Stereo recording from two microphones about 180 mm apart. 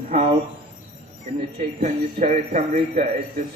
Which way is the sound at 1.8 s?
45° right (ahead or behind).